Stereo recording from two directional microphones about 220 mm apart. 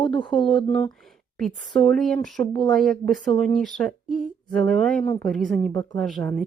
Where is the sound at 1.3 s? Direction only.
Centre (ahead or behind).